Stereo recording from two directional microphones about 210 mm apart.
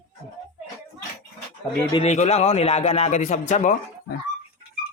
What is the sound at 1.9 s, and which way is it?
A man's voice, 30° left (ahead or behind).